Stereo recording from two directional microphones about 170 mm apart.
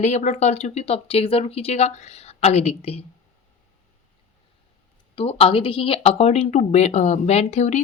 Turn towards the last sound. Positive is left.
turn(degrees=40)  # may be behind; listen again after turning